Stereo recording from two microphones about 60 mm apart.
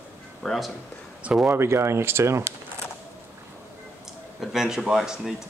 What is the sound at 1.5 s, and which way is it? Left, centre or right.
Speech, right.